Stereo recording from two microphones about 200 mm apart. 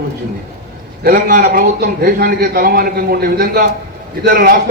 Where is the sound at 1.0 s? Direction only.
50° right (ahead or behind).